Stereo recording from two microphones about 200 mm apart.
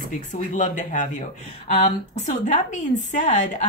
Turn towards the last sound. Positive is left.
turn(degrees=40)  # may be behind; listen again after turning